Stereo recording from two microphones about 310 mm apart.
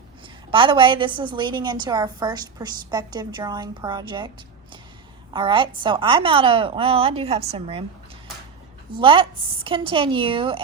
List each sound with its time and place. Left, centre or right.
0.5 s a woman's voice: centre
5.3 s a woman's voice: centre
9.0 s a woman's voice: centre